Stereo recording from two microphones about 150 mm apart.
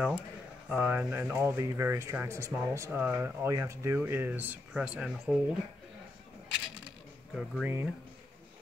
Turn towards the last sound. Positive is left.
turn(degrees=-10)  # may be behind; listen again after turning